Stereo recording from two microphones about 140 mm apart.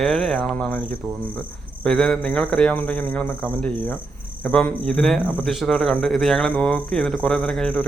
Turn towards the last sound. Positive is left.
turn(degrees=5)  # may be behind; listen again after turning